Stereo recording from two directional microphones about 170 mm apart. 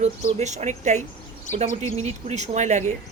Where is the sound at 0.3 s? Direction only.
45° right (ahead or behind).